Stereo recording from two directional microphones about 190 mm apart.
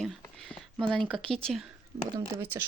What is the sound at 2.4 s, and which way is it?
Speech, 10° right (ahead or behind).